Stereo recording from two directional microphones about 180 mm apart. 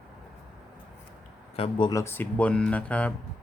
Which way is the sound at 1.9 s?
15° left (ahead or behind).